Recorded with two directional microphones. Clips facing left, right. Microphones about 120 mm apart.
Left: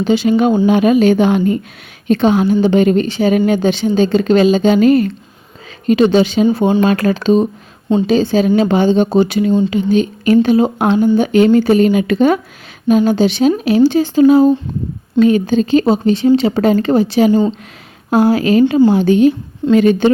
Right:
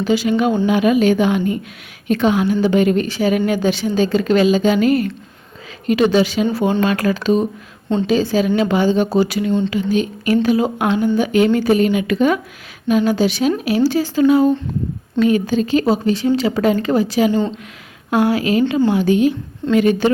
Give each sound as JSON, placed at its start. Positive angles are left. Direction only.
{"t": 0.0, "sound": "a woman's voice", "side_deg": 25}